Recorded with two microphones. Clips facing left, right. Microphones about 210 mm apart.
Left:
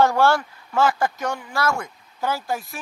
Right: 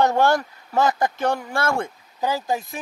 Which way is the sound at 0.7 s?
35° right (ahead or behind).